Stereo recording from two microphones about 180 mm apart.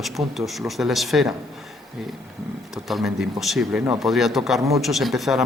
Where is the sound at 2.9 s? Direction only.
Centre (ahead or behind).